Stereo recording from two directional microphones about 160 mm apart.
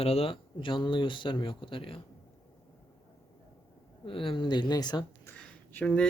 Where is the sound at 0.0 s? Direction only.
40° left (ahead or behind).